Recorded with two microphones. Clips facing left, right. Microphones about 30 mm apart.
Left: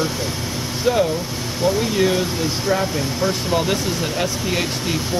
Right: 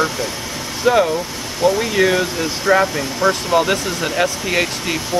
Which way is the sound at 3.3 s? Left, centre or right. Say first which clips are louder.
Right 6 dB; centre.